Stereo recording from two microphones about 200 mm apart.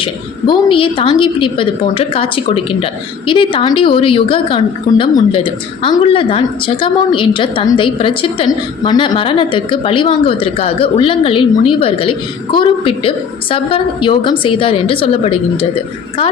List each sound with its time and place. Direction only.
0.0 s a woman's voice: 25° left (ahead or behind)